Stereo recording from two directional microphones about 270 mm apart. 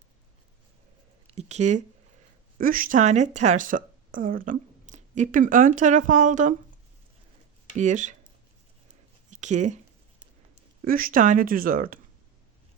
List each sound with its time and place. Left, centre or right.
1.3 s speech: right
7.8 s speech: right
9.3 s speech: right